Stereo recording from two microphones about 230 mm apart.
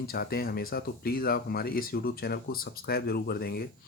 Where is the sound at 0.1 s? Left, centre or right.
Left.